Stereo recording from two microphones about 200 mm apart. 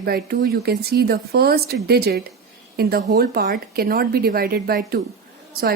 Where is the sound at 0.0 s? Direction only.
50° right (ahead or behind).